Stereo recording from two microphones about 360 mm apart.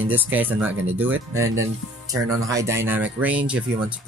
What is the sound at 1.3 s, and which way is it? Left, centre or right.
Speech, right.